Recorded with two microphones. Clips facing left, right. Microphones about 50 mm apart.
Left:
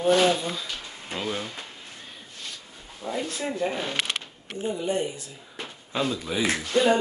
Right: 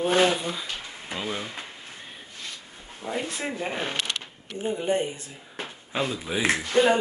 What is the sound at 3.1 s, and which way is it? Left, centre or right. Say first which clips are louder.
Speech: left 1 dB; right.